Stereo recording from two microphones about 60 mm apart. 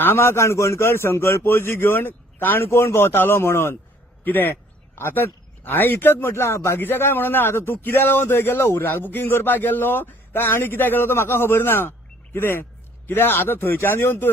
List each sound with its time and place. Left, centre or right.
0.0 s speech: left
2.6 s speech: left